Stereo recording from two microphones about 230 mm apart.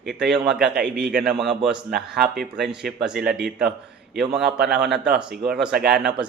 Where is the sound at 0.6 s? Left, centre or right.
Right.